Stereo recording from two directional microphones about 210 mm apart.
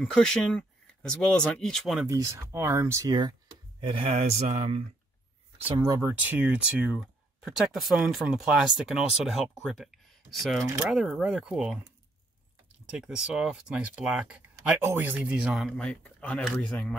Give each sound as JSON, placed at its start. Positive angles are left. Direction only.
{"t": 0.0, "sound": "speech", "side_deg": 5}
{"t": 2.0, "sound": "speech", "side_deg": -15}
{"t": 5.7, "sound": "speech", "side_deg": -15}